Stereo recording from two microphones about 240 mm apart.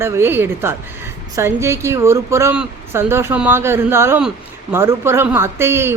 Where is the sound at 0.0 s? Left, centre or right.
Centre.